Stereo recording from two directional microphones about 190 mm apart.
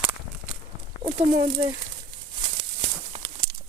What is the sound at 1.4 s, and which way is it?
Speech, 25° right (ahead or behind).